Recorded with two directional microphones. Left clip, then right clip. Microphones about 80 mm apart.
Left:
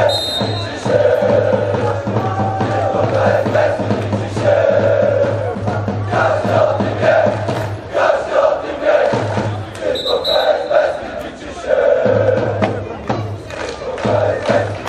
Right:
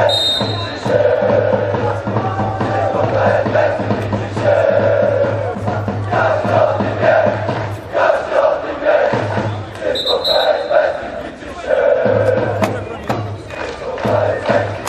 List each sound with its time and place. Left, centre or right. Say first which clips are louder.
0.0 s music: right 1 dB; left
12.5 s music: even; right
14.0 s music: even; left